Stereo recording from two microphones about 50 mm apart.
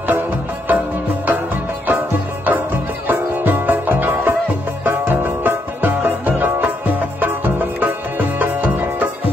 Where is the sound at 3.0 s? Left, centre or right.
Right.